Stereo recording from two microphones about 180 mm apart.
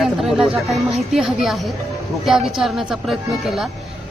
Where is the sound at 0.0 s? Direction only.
Centre (ahead or behind).